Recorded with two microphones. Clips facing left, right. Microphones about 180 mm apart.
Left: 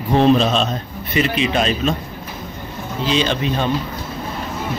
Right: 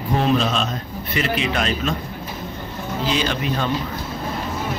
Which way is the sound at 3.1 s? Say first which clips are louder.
Left 6 dB; 25° left (ahead or behind).